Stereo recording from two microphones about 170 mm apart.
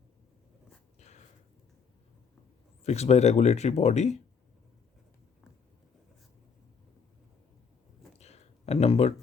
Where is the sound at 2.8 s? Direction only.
40° left (ahead or behind).